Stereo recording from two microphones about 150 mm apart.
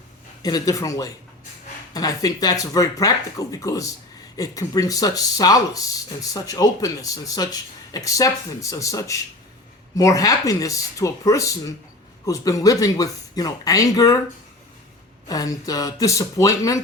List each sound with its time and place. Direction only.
0.4 s speech: 25° left (ahead or behind)
15.3 s speech: 25° left (ahead or behind)